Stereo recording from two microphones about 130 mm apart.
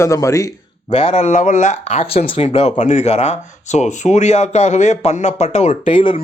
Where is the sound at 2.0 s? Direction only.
45° left (ahead or behind).